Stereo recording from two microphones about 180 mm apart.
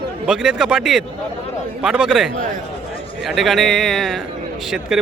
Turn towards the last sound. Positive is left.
turn(degrees=-5)  # may be behind; listen again after turning